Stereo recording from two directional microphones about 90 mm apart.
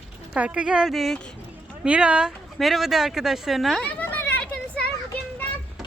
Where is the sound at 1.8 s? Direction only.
10° right (ahead or behind).